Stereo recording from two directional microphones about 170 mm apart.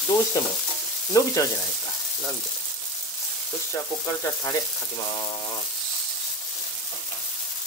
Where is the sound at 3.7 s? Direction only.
20° left (ahead or behind).